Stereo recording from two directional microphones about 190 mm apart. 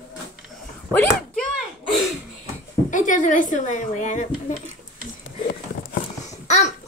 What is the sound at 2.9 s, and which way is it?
A woman's voice, 40° left (ahead or behind).